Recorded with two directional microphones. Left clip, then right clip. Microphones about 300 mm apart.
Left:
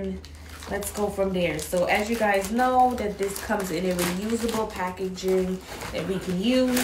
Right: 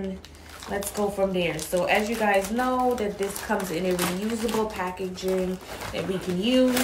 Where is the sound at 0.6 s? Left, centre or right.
Centre.